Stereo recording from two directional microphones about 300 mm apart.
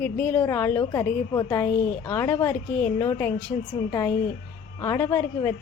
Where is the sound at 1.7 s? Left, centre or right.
Left.